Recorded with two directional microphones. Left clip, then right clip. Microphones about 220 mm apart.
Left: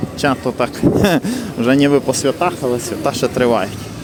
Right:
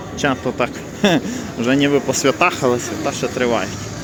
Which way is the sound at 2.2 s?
Centre (ahead or behind).